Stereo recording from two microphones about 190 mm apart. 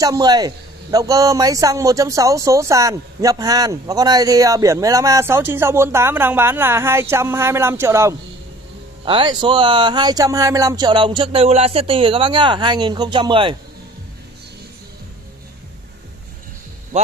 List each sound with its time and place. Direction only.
0.0 s speech: 20° right (ahead or behind)
9.0 s speech: 25° right (ahead or behind)